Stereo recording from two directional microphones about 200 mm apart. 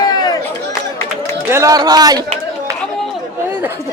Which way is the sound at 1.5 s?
15° right (ahead or behind).